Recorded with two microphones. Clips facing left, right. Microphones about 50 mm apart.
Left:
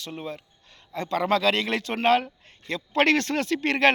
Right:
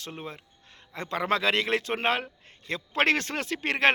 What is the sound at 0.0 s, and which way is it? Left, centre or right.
Speech, right.